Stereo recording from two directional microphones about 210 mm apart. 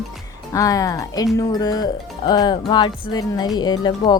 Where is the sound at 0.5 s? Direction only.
15° left (ahead or behind).